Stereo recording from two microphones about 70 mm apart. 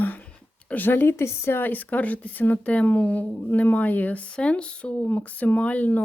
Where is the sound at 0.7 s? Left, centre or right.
Left.